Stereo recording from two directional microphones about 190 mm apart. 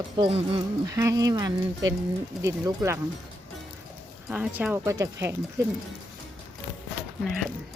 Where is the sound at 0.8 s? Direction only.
15° right (ahead or behind).